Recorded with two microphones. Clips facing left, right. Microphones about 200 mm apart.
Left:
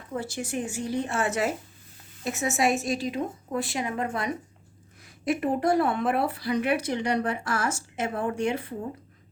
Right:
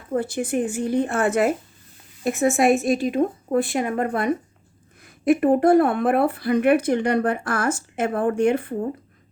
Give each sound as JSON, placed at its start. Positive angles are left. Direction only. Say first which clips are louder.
{"t": 0.1, "sound": "a woman's voice", "louder": "right 8 dB", "side_deg": -55}